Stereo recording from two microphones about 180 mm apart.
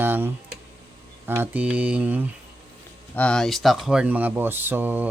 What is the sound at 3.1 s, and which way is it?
Speech, 5° left (ahead or behind).